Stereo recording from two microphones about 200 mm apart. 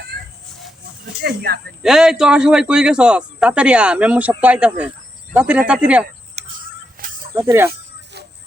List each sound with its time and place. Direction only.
1.2 s speech: 55° right (ahead or behind)
1.8 s speech: centre (ahead or behind)
6.4 s a sound: 35° right (ahead or behind)
7.0 s snake: 45° right (ahead or behind)
7.3 s speech: 10° right (ahead or behind)